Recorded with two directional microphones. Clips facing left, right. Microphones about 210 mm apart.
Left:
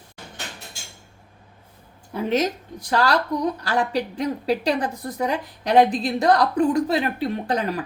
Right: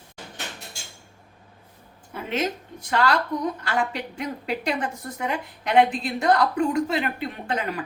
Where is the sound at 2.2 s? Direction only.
40° left (ahead or behind).